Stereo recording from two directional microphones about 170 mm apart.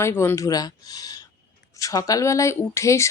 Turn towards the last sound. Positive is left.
turn(degrees=15)  # may be behind; listen again after turning